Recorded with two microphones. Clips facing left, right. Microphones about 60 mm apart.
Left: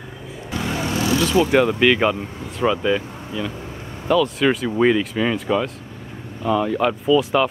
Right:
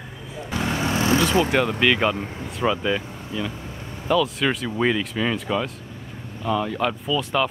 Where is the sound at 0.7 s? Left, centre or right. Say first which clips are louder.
Even; right.